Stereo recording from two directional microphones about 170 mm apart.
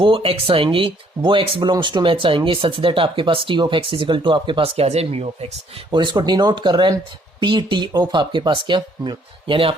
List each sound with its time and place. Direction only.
0.0 s speech: 30° right (ahead or behind)
5.9 s speech: 25° right (ahead or behind)